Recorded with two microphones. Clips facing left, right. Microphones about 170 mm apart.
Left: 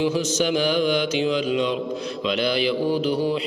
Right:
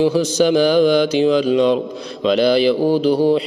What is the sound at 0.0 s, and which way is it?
Speech, 35° right (ahead or behind).